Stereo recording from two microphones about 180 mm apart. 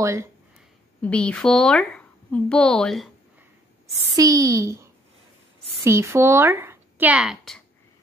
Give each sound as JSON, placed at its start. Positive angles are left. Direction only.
{"t": 0.0, "sound": "a woman's voice", "side_deg": -15}
{"t": 1.0, "sound": "a woman's voice", "side_deg": 5}
{"t": 4.1, "sound": "a woman's voice", "side_deg": -20}
{"t": 5.9, "sound": "a woman's voice", "side_deg": -15}